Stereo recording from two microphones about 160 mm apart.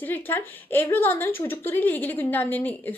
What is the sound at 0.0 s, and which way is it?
A woman's voice, 10° left (ahead or behind).